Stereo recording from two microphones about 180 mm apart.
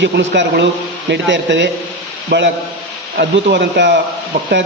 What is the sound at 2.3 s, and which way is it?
A man's voice, 70° right (ahead or behind).